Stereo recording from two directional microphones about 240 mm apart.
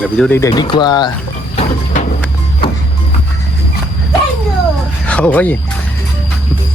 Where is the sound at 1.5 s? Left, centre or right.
Left.